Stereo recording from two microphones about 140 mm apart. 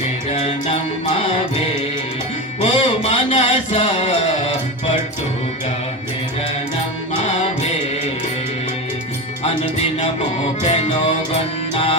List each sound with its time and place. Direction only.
0.3 s music: 45° left (ahead or behind)
2.6 s music: 50° left (ahead or behind)
10.6 s music: 50° left (ahead or behind)